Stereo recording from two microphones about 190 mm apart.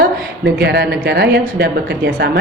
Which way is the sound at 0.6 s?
60° right (ahead or behind).